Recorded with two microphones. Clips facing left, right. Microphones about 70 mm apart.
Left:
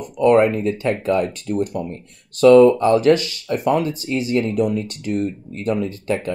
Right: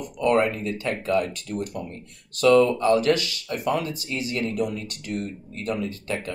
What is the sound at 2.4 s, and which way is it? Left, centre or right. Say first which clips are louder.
Speech: left 7 dB; left.